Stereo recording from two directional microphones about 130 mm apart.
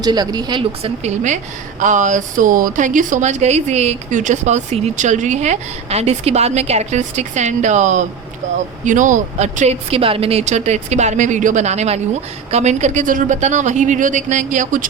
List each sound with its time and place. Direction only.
0.0 s speech: 30° right (ahead or behind)
0.8 s a woman's voice: 60° right (ahead or behind)
1.8 s a woman's voice: 75° right (ahead or behind)